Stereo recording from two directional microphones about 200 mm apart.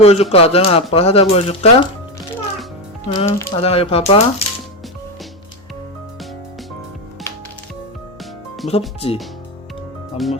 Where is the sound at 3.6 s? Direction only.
30° left (ahead or behind).